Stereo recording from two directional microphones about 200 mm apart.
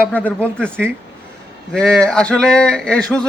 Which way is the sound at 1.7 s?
5° left (ahead or behind).